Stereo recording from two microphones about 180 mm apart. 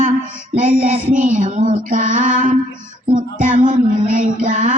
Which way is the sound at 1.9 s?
45° right (ahead or behind).